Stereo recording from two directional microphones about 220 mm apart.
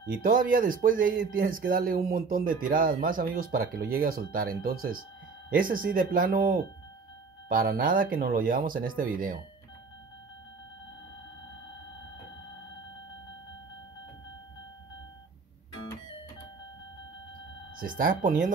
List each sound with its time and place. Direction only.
0.0 s speech: 40° right (ahead or behind)
17.7 s speech: 40° right (ahead or behind)